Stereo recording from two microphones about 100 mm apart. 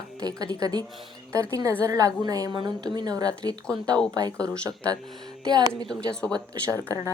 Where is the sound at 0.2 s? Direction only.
40° right (ahead or behind).